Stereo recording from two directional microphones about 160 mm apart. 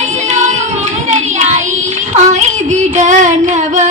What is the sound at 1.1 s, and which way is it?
Child singing, 45° right (ahead or behind).